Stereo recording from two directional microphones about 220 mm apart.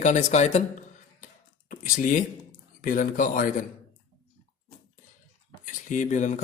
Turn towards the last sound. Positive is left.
turn(degrees=35)  # may be behind; listen again after turning